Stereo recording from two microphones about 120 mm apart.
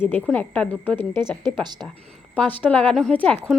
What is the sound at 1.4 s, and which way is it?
Speech, 35° right (ahead or behind).